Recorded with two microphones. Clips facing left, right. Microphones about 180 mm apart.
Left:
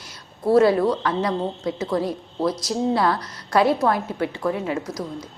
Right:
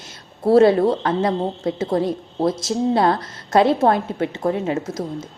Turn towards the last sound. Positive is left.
turn(degrees=-25)  # may be behind; listen again after turning